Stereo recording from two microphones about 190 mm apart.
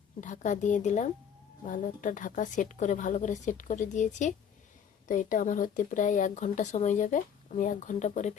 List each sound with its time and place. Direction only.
0.2 s speech: 40° left (ahead or behind)